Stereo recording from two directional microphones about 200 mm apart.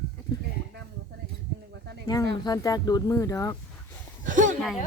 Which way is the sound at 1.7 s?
55° right (ahead or behind).